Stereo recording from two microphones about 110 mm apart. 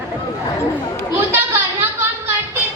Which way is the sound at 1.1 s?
20° right (ahead or behind).